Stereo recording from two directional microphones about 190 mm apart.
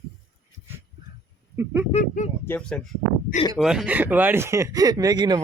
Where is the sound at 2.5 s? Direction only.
5° left (ahead or behind).